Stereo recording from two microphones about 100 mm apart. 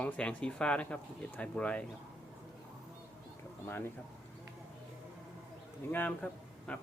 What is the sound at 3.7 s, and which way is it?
Speech, 20° left (ahead or behind).